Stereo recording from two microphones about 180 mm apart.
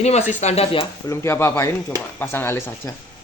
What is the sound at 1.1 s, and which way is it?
Speech, 15° left (ahead or behind).